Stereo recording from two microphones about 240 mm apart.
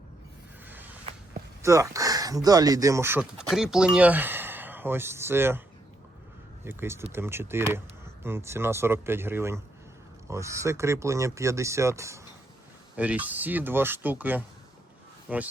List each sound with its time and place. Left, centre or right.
1.6 s speech: centre
6.7 s speech: centre